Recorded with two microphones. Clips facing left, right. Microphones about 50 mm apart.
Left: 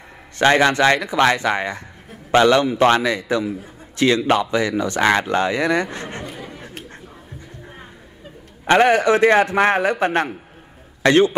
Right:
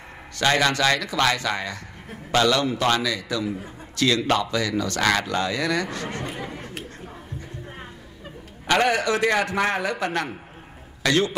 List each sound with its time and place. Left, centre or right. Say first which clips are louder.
0.4 s a man's voice: left 6 dB; left
6.3 s speech: right 1 dB; right
8.6 s a man's voice: left 6 dB; left